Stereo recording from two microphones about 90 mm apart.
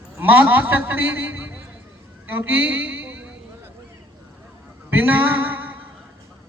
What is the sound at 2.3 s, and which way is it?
Music, 20° right (ahead or behind).